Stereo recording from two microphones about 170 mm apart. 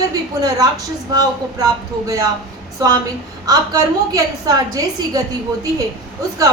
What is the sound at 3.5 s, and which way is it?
A woman's voice, 20° right (ahead or behind).